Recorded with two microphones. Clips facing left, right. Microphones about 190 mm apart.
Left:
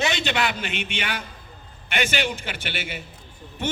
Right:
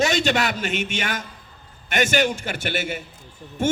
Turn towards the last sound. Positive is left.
turn(degrees=-45)  # may be behind; listen again after turning